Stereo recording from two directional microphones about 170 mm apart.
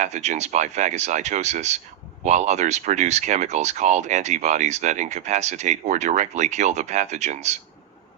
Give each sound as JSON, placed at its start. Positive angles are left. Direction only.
{"t": 0.0, "sound": "speech", "side_deg": -40}